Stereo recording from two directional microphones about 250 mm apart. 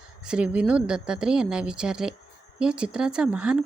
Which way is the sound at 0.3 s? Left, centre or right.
Centre.